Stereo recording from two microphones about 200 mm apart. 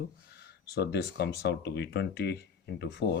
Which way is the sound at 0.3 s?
55° left (ahead or behind).